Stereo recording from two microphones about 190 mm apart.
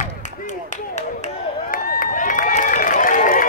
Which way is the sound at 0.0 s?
40° left (ahead or behind).